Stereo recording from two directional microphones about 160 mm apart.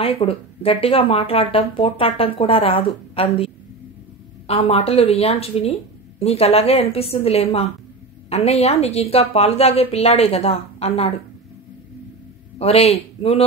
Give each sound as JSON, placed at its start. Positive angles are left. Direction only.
{"t": 0.0, "sound": "speech", "side_deg": 35}
{"t": 12.5, "sound": "a man's voice", "side_deg": 40}